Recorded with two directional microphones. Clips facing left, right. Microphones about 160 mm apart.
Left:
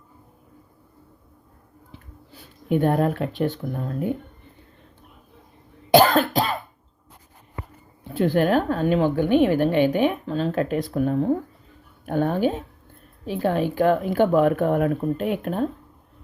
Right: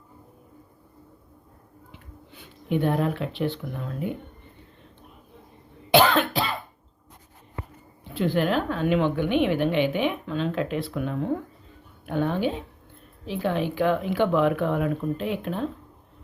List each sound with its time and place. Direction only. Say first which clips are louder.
1.9 s speech: left 2 dB; 40° left (ahead or behind)
5.9 s cough: left 3 dB; 40° left (ahead or behind)
8.1 s a woman's voice: left 4 dB; 45° left (ahead or behind)